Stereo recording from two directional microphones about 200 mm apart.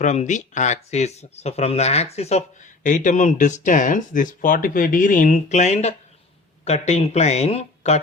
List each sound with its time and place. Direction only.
0.0 s speech: 35° left (ahead or behind)